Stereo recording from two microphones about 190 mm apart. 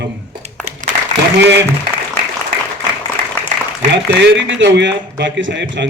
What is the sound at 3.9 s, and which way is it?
A man's voice, 70° right (ahead or behind).